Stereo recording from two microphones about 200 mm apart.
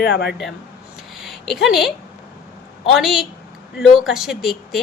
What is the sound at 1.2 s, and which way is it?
Speech, centre (ahead or behind).